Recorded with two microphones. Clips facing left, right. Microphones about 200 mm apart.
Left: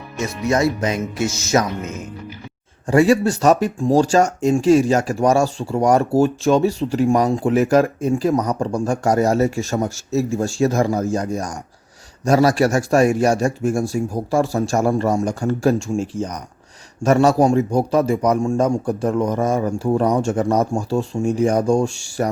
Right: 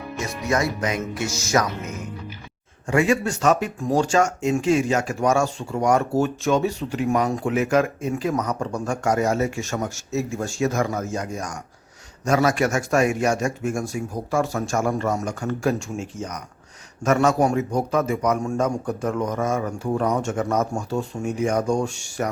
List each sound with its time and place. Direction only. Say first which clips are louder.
0.5 s speech: left 4 dB; 25° left (ahead or behind)
2.8 s speech: left 6 dB; 35° left (ahead or behind)